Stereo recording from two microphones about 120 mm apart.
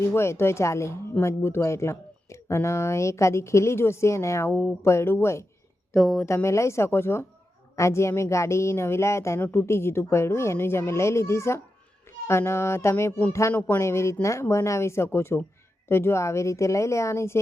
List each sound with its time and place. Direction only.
0.0 s speech: 20° left (ahead or behind)
5.9 s speech: centre (ahead or behind)
6.2 s speech: 25° left (ahead or behind)